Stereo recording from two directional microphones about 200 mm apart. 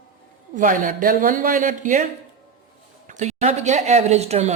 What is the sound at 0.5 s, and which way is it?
A woman's voice, 40° right (ahead or behind).